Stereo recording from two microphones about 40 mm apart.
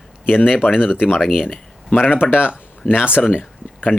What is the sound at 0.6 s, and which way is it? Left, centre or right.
Speech, left.